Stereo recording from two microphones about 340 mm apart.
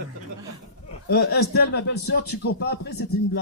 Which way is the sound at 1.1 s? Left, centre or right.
Left.